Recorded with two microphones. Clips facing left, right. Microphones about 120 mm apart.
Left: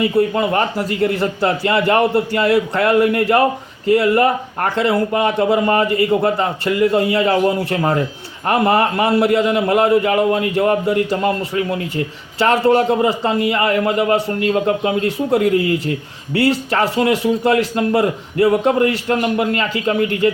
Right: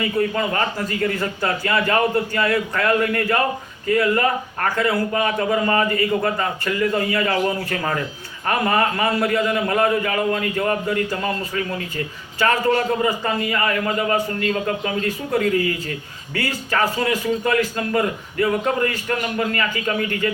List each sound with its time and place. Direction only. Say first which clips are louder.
0.0 s a man's voice: left 5 dB; 25° left (ahead or behind)